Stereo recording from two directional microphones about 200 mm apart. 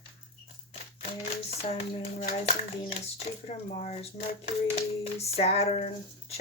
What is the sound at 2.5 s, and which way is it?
Speech, 30° left (ahead or behind).